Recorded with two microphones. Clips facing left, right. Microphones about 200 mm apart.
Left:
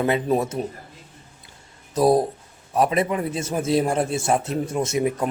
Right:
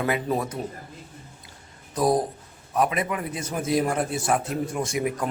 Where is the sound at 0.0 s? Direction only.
25° left (ahead or behind).